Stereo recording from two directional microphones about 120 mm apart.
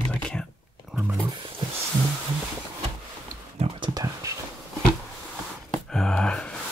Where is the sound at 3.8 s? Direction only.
35° right (ahead or behind).